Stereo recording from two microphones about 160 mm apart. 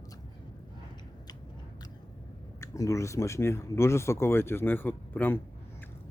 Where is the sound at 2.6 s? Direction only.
20° left (ahead or behind).